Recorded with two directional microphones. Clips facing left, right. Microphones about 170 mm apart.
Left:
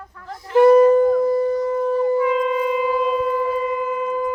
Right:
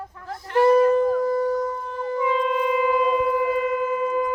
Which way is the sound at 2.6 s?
Centre (ahead or behind).